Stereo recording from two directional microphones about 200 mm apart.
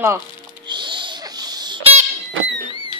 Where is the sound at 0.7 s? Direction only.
25° right (ahead or behind).